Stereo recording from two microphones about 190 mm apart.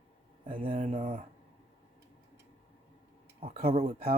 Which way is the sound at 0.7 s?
35° right (ahead or behind).